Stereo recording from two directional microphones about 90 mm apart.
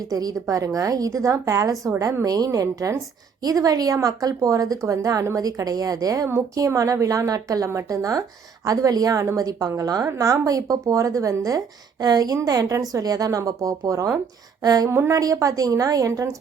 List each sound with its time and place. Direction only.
0.1 s a woman's voice: 40° right (ahead or behind)
14.8 s a woman's voice: 30° right (ahead or behind)
15.2 s a woman's voice: 40° right (ahead or behind)